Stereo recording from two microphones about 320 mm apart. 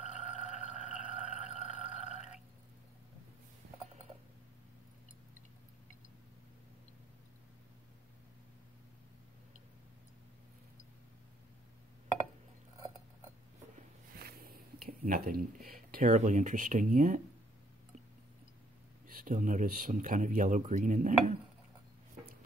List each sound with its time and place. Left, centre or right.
0.1 s a sound: centre
14.1 s speech: right
19.0 s speech: right